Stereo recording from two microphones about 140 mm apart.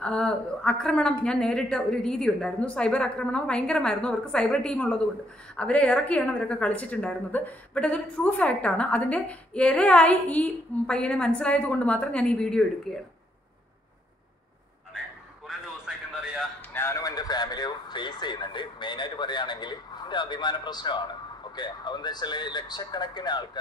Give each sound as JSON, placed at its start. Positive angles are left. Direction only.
{"t": 0.0, "sound": "a woman's voice", "side_deg": 5}
{"t": 15.4, "sound": "a sound", "side_deg": -5}
{"t": 16.7, "sound": "speech", "side_deg": 20}